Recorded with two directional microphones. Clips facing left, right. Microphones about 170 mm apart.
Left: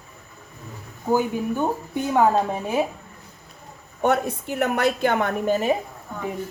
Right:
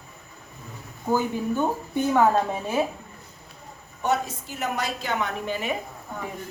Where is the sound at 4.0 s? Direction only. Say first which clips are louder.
Left 4 dB; 60° left (ahead or behind).